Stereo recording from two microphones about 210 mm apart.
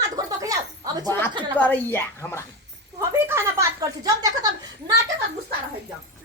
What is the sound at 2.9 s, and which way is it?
Speech, 10° right (ahead or behind).